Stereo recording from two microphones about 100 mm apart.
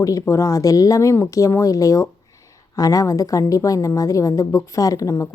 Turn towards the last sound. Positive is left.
turn(degrees=35)  # may be behind; listen again after turning